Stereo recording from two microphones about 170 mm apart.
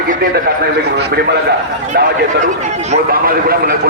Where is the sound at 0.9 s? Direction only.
75° right (ahead or behind).